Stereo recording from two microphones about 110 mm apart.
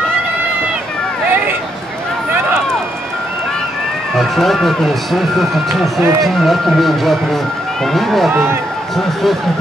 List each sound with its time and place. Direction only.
4.1 s speech: centre (ahead or behind)
8.3 s speech: 20° right (ahead or behind)
8.9 s speech: centre (ahead or behind)